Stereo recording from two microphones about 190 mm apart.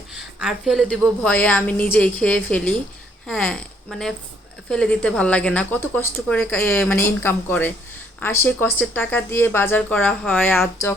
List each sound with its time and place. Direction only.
0.1 s a woman's voice: 5° right (ahead or behind)